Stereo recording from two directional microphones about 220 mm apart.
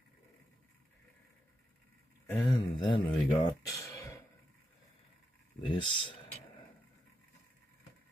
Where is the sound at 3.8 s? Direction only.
15° left (ahead or behind).